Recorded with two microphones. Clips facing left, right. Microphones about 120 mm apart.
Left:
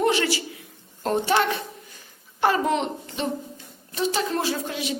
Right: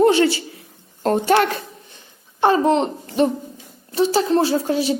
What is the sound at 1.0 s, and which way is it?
Speech, 45° right (ahead or behind).